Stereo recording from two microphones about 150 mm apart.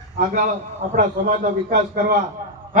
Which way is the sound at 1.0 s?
60° right (ahead or behind).